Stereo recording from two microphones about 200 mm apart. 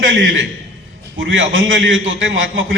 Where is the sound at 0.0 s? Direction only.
70° right (ahead or behind).